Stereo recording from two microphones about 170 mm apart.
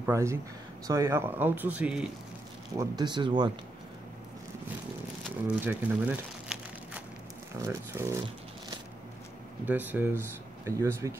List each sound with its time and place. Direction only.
0.0 s speech: 15° right (ahead or behind)
2.8 s speech: 25° right (ahead or behind)
5.6 s crumpling: 10° right (ahead or behind)
7.6 s speech: 15° right (ahead or behind)
9.7 s speech: 10° right (ahead or behind)